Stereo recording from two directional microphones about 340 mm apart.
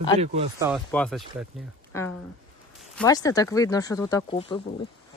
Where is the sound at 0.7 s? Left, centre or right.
Centre.